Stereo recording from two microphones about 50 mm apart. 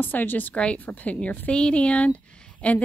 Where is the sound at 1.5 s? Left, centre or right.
Left.